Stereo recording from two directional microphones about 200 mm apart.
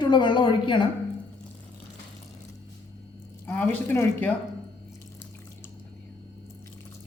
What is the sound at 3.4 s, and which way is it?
Speech, 10° left (ahead or behind).